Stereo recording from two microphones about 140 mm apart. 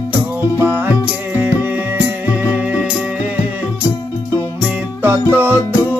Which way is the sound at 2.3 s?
10° right (ahead or behind).